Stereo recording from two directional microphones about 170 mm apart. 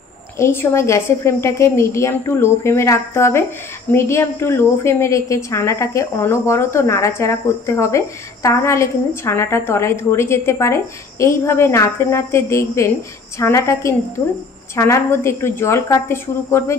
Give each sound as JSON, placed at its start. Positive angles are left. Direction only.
{"t": 0.4, "sound": "a woman's voice", "side_deg": 15}